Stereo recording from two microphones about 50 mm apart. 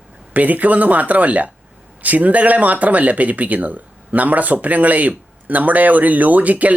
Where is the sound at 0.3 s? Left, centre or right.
Right.